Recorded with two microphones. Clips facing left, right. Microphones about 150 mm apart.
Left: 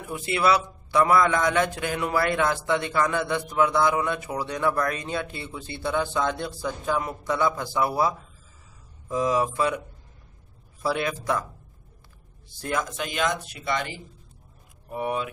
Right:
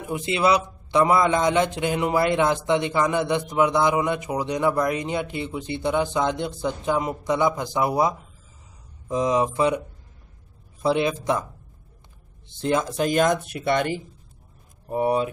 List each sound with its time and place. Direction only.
0.0 s a man's voice: 20° right (ahead or behind)
12.4 s speech: 25° right (ahead or behind); by 13.9 s 55° right (ahead or behind)
14.9 s speech: 35° right (ahead or behind)